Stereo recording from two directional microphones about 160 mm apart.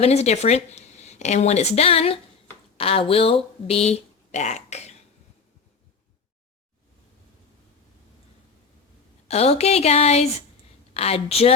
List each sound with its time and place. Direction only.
0.0 s a woman's voice: 40° left (ahead or behind)
9.2 s speech: 40° left (ahead or behind)